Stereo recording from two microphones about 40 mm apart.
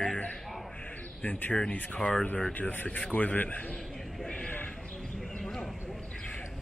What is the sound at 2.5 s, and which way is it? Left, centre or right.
Speech, left.